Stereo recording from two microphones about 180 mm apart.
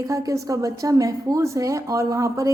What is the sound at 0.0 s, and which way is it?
A woman's voice, 20° right (ahead or behind).